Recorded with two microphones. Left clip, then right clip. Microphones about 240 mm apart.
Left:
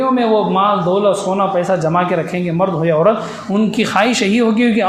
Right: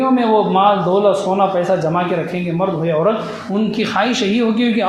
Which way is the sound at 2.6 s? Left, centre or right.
Left.